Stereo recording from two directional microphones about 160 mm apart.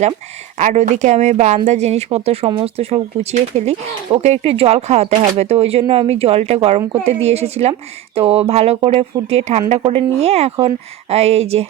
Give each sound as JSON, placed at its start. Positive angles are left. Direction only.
{"t": 0.6, "sound": "speech", "side_deg": -45}